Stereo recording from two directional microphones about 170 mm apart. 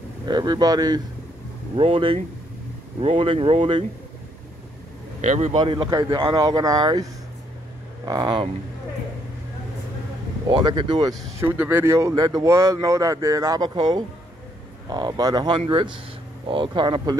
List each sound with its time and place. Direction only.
0.2 s speech: 25° right (ahead or behind)
5.2 s a man's voice: 45° right (ahead or behind)
5.6 s speech: 30° right (ahead or behind)
10.5 s speech: 25° right (ahead or behind)
11.3 s speech: 10° right (ahead or behind)